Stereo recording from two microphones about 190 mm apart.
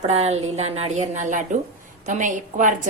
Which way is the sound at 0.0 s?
35° right (ahead or behind).